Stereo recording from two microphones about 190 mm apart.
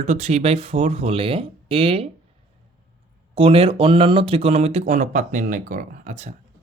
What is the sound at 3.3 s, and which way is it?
Speech, 30° right (ahead or behind).